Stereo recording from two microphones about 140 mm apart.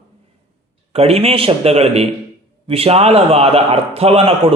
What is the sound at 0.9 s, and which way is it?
Speech, 45° right (ahead or behind).